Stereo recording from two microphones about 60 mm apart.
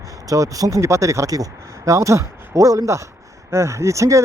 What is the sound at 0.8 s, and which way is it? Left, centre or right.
Speech, right.